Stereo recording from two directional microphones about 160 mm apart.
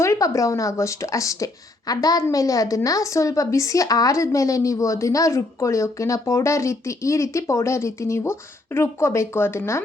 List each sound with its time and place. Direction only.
0.0 s a woman's voice: 20° left (ahead or behind)